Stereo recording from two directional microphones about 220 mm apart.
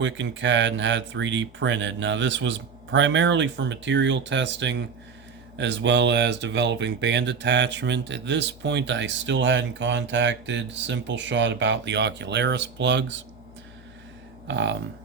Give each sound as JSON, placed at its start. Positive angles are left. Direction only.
{"t": 0.0, "sound": "speech", "side_deg": -55}
{"t": 14.4, "sound": "speech", "side_deg": -55}